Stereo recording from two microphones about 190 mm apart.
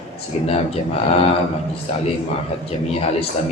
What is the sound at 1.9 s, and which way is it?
Speech, 35° left (ahead or behind).